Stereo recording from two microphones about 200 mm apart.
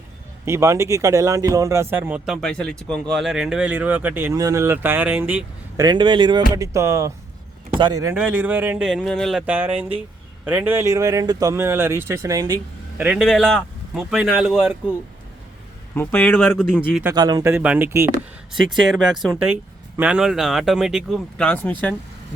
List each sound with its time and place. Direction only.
0.4 s speech: 15° right (ahead or behind)
5.7 s speech: 20° right (ahead or behind)
13.0 s speech: 5° right (ahead or behind)
16.0 s speech: 10° left (ahead or behind)
17.0 s speech: 15° right (ahead or behind)
18.6 s speech: centre (ahead or behind)